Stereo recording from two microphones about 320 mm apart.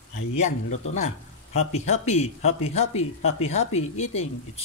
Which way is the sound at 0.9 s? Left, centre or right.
Left.